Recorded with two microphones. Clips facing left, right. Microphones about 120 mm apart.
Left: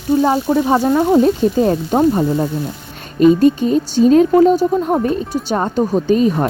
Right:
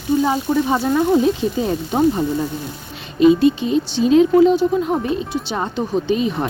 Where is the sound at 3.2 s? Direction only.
45° left (ahead or behind).